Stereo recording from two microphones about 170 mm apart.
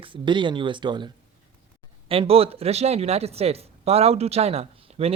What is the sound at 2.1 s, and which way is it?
Speech, 35° right (ahead or behind).